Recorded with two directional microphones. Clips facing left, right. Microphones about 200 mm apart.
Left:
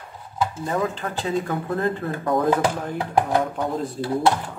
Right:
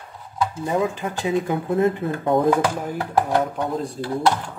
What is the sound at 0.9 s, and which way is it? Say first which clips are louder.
Speech: right 2 dB; 15° right (ahead or behind).